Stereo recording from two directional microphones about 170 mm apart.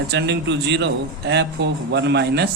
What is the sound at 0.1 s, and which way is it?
A man's voice, 80° right.